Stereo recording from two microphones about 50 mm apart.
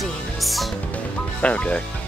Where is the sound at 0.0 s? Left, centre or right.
Centre.